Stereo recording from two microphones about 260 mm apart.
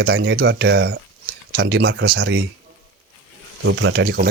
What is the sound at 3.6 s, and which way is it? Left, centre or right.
Speech, right.